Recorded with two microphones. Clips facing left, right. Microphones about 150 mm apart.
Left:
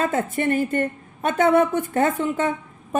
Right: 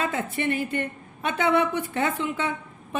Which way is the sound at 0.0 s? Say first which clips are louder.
Left 5 dB; 45° left (ahead or behind).